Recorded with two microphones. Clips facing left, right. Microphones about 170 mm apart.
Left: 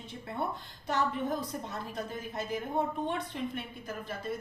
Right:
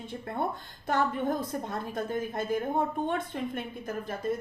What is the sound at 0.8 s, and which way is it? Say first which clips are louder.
A woman's voice: right 3 dB; 50° right (ahead or behind).